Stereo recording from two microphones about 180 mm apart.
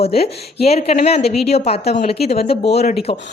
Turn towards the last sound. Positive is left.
turn(degrees=35)  # may be behind; listen again after turning